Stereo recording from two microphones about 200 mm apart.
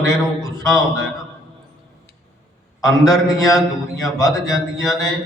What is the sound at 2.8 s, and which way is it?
A man's voice, 15° left (ahead or behind).